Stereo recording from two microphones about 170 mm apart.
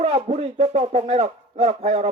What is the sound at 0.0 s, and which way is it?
A man's voice, 40° right (ahead or behind).